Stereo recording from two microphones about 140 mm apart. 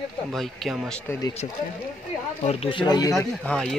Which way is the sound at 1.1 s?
25° left (ahead or behind).